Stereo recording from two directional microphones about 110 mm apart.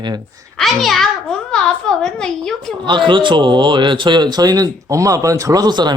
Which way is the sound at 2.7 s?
45° right (ahead or behind).